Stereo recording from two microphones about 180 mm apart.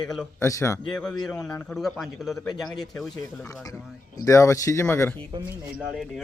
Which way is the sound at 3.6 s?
20° left (ahead or behind).